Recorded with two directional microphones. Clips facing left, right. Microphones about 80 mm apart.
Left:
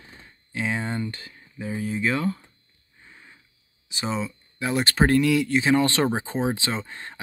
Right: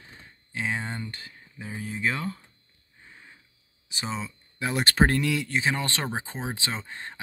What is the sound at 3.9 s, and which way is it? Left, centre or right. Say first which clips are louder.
Speech: left 5 dB; centre.